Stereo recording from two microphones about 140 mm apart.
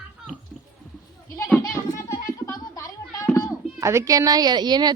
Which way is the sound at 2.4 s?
25° left (ahead or behind).